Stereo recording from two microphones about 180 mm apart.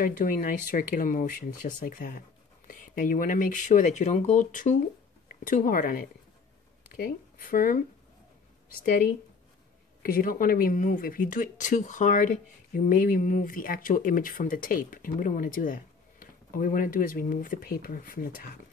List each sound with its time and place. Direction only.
0.0 s speech: 50° left (ahead or behind)
8.8 s speech: 55° left (ahead or behind)